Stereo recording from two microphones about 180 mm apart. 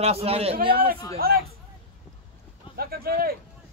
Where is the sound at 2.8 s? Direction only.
55° right (ahead or behind).